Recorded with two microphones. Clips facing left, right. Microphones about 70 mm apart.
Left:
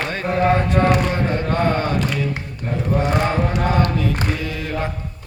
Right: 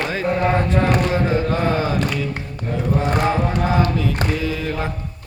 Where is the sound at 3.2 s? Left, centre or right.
Centre.